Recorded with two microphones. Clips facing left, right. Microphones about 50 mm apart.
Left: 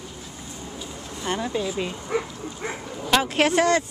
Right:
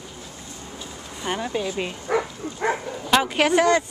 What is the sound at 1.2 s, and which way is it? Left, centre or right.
Speech, centre.